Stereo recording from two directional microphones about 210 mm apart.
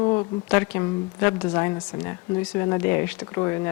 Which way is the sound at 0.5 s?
10° left (ahead or behind).